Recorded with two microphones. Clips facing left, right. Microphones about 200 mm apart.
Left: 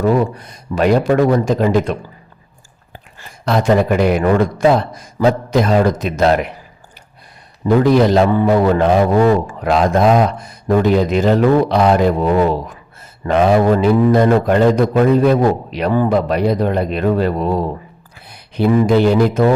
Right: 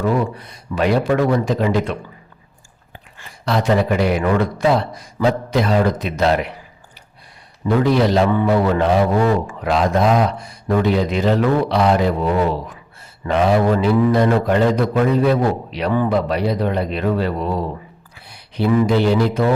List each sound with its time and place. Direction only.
0.0 s a man's voice: 45° left (ahead or behind)
7.6 s a man's voice: 45° left (ahead or behind)
18.3 s a sound: 50° left (ahead or behind)
18.9 s a man's voice: 50° left (ahead or behind)